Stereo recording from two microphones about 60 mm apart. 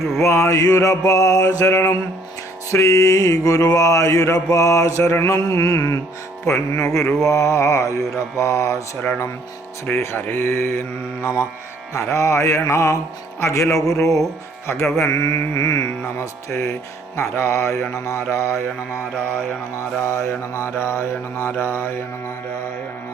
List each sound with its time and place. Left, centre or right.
0.2 s mantra: left
14.7 s mantra: left
15.0 s mantra: left
17.2 s mantra: left
19.7 s mantra: left